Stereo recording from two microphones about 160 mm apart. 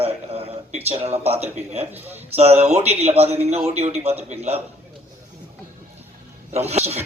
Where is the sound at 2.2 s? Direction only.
40° right (ahead or behind).